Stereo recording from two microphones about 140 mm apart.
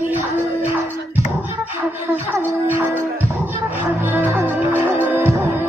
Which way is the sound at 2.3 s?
15° right (ahead or behind).